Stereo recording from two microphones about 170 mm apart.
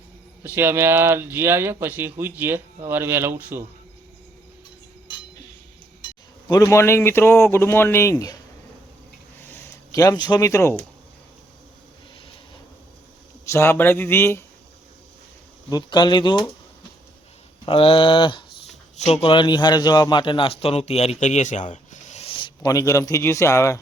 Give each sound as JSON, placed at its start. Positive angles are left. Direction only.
{"t": 0.4, "sound": "speech", "side_deg": -15}
{"t": 6.5, "sound": "speech", "side_deg": 20}
{"t": 9.4, "sound": "speech", "side_deg": 15}
{"t": 13.4, "sound": "speech", "side_deg": 15}
{"t": 15.7, "sound": "a man's voice", "side_deg": 25}
{"t": 17.7, "sound": "a man's voice", "side_deg": 30}